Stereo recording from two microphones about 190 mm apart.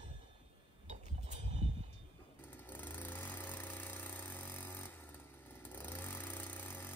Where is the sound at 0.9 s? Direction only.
35° right (ahead or behind).